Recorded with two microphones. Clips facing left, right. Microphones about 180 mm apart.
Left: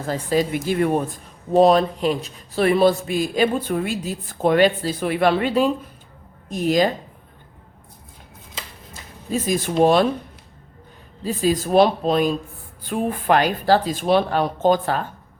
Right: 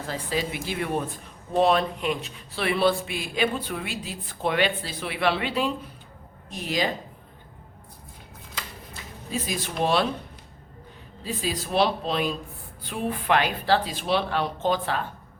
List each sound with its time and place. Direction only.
0.1 s speech: 45° left (ahead or behind)
8.9 s a sound: 45° left (ahead or behind)
9.8 s speech: 45° left (ahead or behind)
11.2 s speech: 45° left (ahead or behind)